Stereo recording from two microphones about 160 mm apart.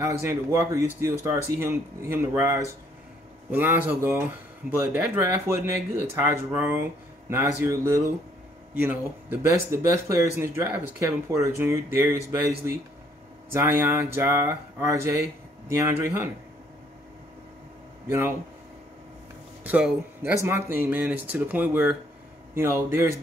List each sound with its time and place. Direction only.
0.0 s speech: 20° right (ahead or behind)
18.0 s speech: 15° right (ahead or behind)
19.6 s speech: 10° right (ahead or behind)